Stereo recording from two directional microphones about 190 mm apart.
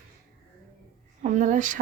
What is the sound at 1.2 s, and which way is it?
Speech, 40° right (ahead or behind).